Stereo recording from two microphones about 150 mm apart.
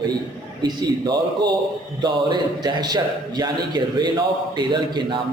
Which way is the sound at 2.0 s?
30° right (ahead or behind).